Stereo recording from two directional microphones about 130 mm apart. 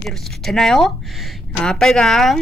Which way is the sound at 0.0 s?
Centre (ahead or behind).